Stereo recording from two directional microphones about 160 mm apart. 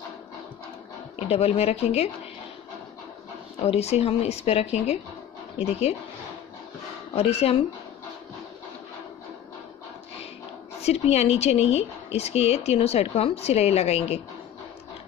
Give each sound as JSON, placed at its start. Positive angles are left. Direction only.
{"t": 1.3, "sound": "a woman's voice", "side_deg": 40}
{"t": 3.6, "sound": "a woman's voice", "side_deg": 40}
{"t": 7.2, "sound": "a woman's voice", "side_deg": 40}
{"t": 10.8, "sound": "a woman's voice", "side_deg": 40}